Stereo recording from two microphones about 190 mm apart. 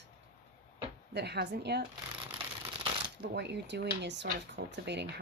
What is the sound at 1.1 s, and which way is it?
Speech, 60° right (ahead or behind).